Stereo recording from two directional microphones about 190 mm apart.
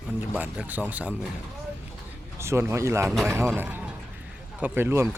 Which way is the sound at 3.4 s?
10° right (ahead or behind).